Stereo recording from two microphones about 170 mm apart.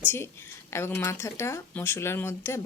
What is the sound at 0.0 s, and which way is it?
Speech, 15° left (ahead or behind).